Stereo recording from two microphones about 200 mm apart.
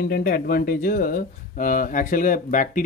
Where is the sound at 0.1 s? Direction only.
50° left (ahead or behind).